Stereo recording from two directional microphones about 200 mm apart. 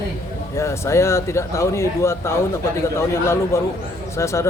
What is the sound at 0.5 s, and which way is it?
Speech, 15° left (ahead or behind).